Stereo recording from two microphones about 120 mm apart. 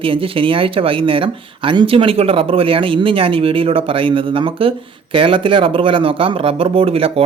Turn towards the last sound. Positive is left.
turn(degrees=-55)  # may be behind; listen again after turning